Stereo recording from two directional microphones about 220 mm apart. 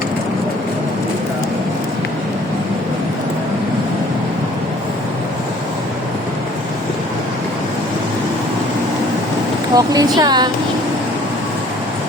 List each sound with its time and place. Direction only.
9.7 s a woman's voice: 15° right (ahead or behind)